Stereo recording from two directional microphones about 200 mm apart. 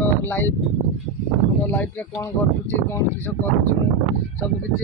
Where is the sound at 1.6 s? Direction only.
10° left (ahead or behind).